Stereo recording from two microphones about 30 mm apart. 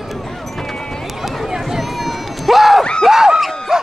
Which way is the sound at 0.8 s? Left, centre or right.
Left.